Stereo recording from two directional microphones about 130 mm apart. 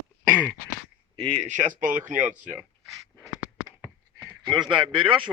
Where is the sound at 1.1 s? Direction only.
45° right (ahead or behind).